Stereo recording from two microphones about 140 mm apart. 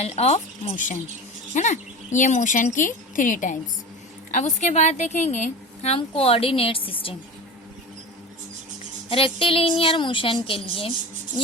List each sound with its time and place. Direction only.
0.0 s speech: 50° left (ahead or behind)
5.9 s a woman's voice: 40° left (ahead or behind)
9.0 s a woman's voice: 40° left (ahead or behind)